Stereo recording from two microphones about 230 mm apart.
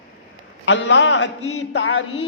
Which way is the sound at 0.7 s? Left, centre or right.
Left.